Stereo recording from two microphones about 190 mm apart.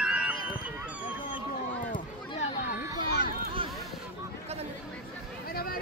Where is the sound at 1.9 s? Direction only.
45° left (ahead or behind).